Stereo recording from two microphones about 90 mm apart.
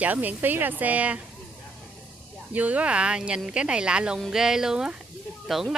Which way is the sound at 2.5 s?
15° right (ahead or behind).